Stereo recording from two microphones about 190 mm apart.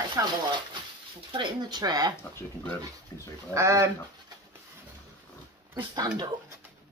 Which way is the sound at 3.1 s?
15° left (ahead or behind).